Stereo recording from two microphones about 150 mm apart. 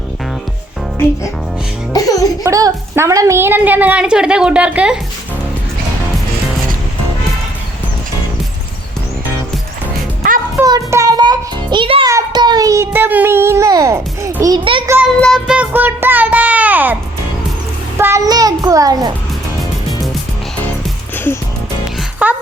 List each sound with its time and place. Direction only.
1.9 s music: 25° left (ahead or behind)
2.4 s a woman's voice: 25° right (ahead or behind)
10.7 s music: 20° right (ahead or behind)
12.0 s a child's voice: 25° right (ahead or behind)
14.6 s a child's voice: 35° right (ahead or behind)
15.0 s child singing: 5° left (ahead or behind)
15.5 s a woman's voice: 10° right (ahead or behind)
22.2 s a sound: 10° right (ahead or behind)